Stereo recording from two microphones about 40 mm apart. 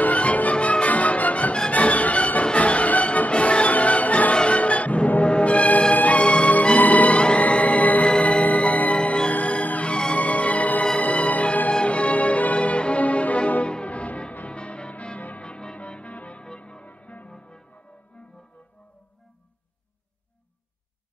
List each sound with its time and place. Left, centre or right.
0.0 s music: left
8.9 s music: left
12.5 s music: left
16.8 s music: left